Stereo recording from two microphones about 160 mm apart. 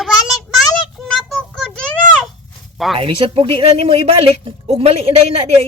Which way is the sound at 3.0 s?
35° right (ahead or behind).